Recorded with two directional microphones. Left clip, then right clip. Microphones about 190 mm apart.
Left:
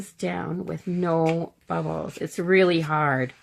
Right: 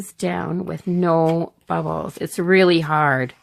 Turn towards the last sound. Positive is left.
turn(degrees=-40)  # may be behind; listen again after turning